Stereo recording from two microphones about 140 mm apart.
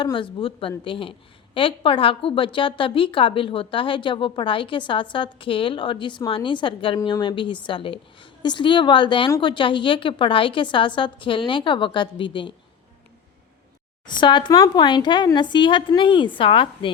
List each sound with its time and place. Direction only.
0.0 s a woman's voice: 35° left (ahead or behind)
14.1 s a woman's voice: 35° left (ahead or behind)